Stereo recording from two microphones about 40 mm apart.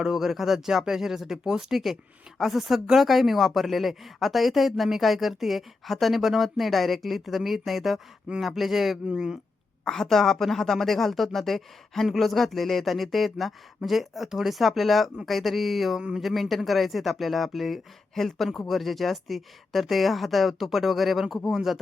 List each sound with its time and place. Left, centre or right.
0.0 s speech: centre
9.0 s speech: centre
9.8 s a woman's voice: centre